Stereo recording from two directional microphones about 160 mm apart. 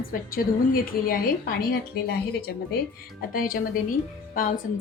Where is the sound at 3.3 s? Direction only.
60° left (ahead or behind).